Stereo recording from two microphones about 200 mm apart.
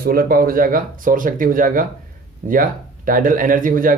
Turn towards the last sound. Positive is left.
turn(degrees=-45)  # may be behind; listen again after turning